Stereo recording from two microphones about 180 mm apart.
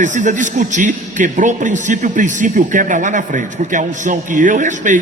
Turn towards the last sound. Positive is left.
turn(degrees=-45)  # may be behind; listen again after turning